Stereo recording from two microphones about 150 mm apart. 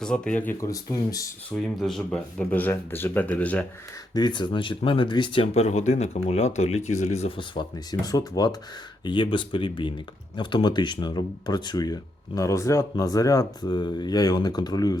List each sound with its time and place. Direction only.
0.0 s speech: 5° left (ahead or behind)
0.6 s speech: 25° left (ahead or behind)
1.5 s speech: 5° left (ahead or behind)
4.1 s speech: 30° left (ahead or behind)